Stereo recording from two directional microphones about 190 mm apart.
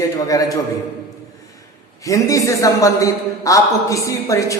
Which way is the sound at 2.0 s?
15° left (ahead or behind).